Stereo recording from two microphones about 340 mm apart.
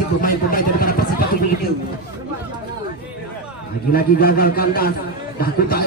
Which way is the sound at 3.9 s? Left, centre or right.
Left.